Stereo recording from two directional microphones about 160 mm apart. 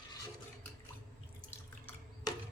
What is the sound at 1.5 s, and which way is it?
Water, 15° left (ahead or behind).